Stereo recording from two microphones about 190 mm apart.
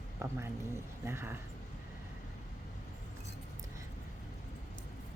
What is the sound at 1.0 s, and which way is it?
Speech, 10° right (ahead or behind).